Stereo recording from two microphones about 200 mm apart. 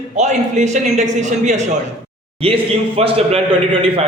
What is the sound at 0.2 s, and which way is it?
A man's voice, 35° right (ahead or behind).